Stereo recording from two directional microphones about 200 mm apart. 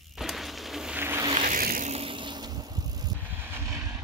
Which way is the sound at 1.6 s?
45° right (ahead or behind).